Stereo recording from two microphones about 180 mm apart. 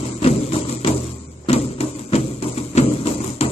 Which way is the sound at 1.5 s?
35° left (ahead or behind).